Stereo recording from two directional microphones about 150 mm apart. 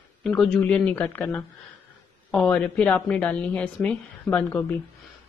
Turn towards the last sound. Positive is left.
turn(degrees=10)  # may be behind; listen again after turning